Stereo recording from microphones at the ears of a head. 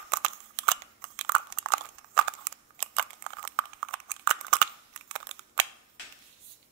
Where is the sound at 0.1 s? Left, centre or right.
Right.